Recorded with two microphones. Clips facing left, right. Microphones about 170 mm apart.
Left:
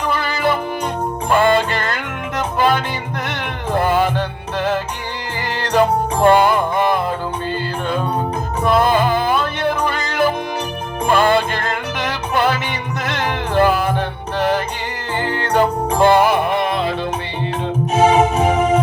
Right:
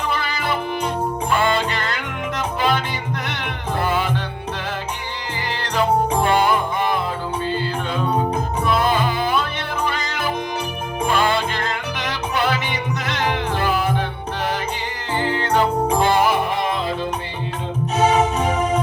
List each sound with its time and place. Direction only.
0.1 s music: 50° left (ahead or behind); by 16.9 s 65° left (ahead or behind)
17.9 s music: 50° left (ahead or behind)